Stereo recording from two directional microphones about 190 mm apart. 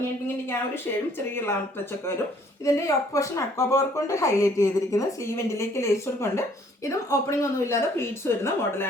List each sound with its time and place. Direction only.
2.6 s speech: 15° left (ahead or behind)